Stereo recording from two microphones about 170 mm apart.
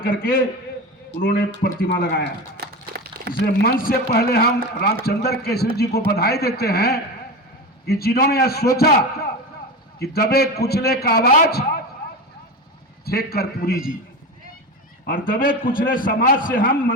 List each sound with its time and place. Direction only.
0.0 s a man's voice: 60° left (ahead or behind)
2.6 s a sound: 70° right (ahead or behind)
3.4 s a man's voice: 70° left (ahead or behind)
13.1 s a man's voice: 65° left (ahead or behind)
15.0 s a man's voice: 55° left (ahead or behind)